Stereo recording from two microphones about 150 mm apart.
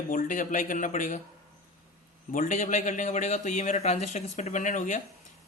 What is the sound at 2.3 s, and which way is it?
Speech, 60° left (ahead or behind).